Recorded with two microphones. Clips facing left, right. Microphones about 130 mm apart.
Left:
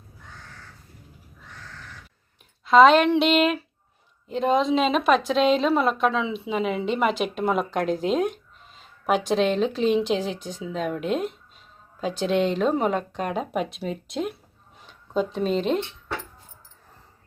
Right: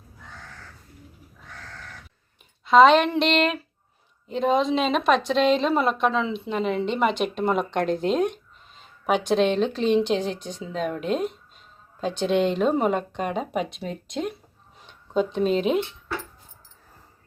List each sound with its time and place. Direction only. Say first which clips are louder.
2.6 s a woman's voice: even; centre (ahead or behind)